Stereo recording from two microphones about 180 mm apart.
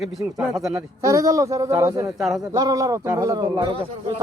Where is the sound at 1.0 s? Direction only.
20° right (ahead or behind).